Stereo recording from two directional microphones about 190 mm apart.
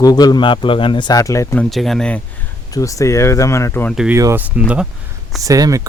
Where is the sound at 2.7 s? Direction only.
15° left (ahead or behind).